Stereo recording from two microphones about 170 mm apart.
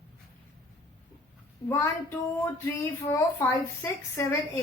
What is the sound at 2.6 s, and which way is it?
A woman's voice, 15° left (ahead or behind).